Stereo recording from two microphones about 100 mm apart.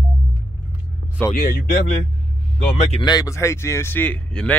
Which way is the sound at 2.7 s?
90° left.